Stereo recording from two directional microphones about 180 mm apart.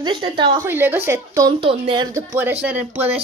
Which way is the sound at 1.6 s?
30° right (ahead or behind).